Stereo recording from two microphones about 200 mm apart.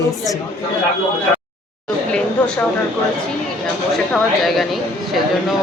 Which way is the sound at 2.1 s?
5° left (ahead or behind).